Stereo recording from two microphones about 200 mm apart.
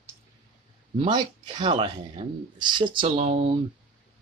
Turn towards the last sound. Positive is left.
turn(degrees=-30)  # may be behind; listen again after turning